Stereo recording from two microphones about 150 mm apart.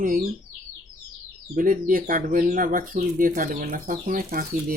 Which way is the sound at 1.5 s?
65° right (ahead or behind).